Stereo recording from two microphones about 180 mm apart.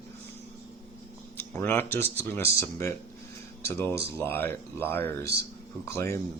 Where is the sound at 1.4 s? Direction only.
10° left (ahead or behind).